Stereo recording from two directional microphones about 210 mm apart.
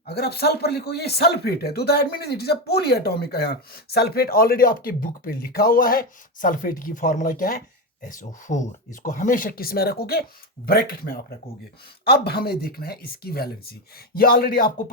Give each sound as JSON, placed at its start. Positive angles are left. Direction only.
{"t": 0.0, "sound": "speech", "side_deg": 50}